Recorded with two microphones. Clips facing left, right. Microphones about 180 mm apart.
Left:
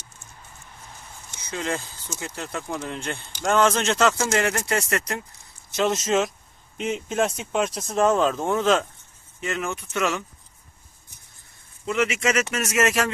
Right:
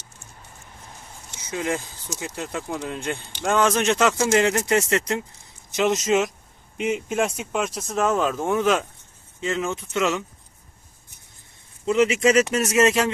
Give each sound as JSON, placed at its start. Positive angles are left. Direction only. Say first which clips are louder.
{"t": 1.4, "sound": "speech", "louder": "right 2 dB", "side_deg": -15}
{"t": 5.7, "sound": "speech", "louder": "right 2 dB", "side_deg": -15}
{"t": 9.4, "sound": "speech", "louder": "right 3 dB", "side_deg": -20}
{"t": 11.9, "sound": "speech", "louder": "right 5 dB", "side_deg": -30}